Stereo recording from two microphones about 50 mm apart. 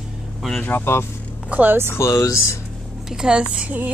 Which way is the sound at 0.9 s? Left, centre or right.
Left.